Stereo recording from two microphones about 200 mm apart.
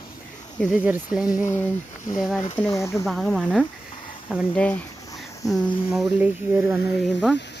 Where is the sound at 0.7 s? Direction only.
5° right (ahead or behind).